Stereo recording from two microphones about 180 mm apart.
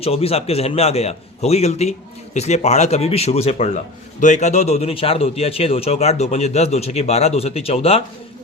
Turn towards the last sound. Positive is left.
turn(degrees=35)  # may be behind; listen again after turning